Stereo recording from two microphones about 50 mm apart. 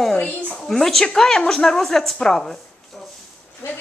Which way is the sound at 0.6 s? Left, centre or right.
Centre.